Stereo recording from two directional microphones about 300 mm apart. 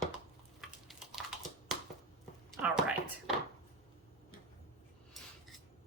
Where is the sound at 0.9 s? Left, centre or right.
Centre.